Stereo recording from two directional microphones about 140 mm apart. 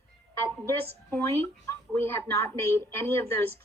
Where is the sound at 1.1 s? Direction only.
20° left (ahead or behind).